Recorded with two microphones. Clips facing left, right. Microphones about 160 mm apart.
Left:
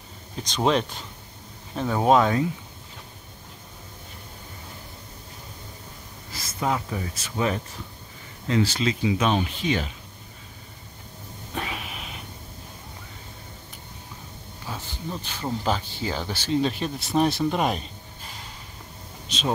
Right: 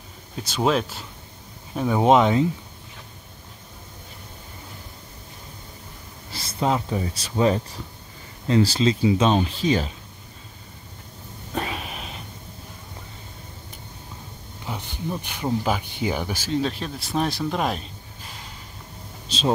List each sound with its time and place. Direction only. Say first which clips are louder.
0.4 s speech: right 1 dB; 5° right (ahead or behind)
1.8 s speech: right 2 dB; 15° right (ahead or behind)
6.3 s speech: right 3 dB; 30° right (ahead or behind)
11.5 s a sound: right 4 dB; 40° right (ahead or behind)
14.7 s speech: right 4 dB; 15° right (ahead or behind)
16.5 s speech: left 1 dB; centre (ahead or behind)
19.2 s a sound: right 4 dB; 30° right (ahead or behind)